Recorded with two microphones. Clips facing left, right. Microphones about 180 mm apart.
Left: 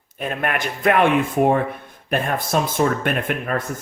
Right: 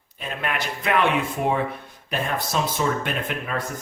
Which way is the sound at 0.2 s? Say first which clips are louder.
Left 5 dB; 50° left (ahead or behind).